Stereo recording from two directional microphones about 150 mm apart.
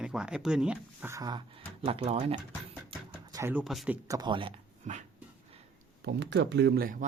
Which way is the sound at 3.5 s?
Centre (ahead or behind).